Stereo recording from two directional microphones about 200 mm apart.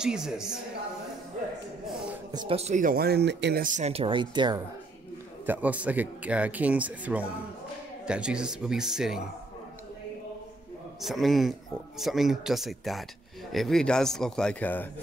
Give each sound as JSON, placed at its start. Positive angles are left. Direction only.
{"t": 0.0, "sound": "a man's voice", "side_deg": -5}
{"t": 2.3, "sound": "speech", "side_deg": -30}
{"t": 3.6, "sound": "speech", "side_deg": -35}
{"t": 5.5, "sound": "a man's voice", "side_deg": -5}
{"t": 11.0, "sound": "a man's voice", "side_deg": 0}